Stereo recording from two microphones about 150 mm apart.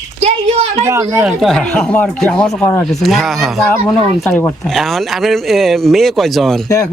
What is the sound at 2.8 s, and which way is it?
Speech, centre (ahead or behind).